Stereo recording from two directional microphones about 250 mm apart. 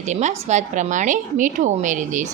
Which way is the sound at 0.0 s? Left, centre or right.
Right.